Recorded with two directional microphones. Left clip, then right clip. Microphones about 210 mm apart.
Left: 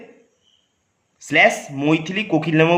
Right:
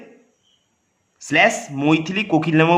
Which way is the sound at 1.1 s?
15° right (ahead or behind).